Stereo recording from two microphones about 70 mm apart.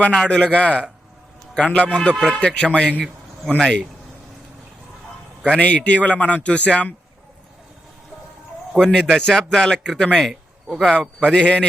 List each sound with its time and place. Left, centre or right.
0.0 s a man's voice: centre
5.5 s a man's voice: centre
8.8 s a man's voice: centre